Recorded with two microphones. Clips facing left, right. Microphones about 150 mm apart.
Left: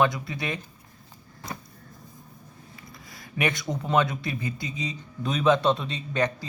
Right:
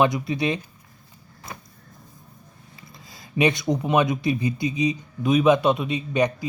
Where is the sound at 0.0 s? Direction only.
20° right (ahead or behind).